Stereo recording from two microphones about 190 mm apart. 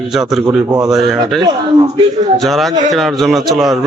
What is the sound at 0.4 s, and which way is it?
Speech, 15° right (ahead or behind).